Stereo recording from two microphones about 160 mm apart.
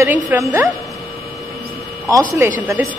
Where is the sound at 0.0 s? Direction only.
15° right (ahead or behind).